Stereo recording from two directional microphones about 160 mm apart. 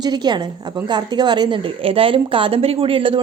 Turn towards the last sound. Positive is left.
turn(degrees=-35)  # may be behind; listen again after turning